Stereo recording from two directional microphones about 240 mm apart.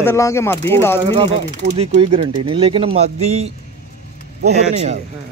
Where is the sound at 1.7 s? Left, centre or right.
Right.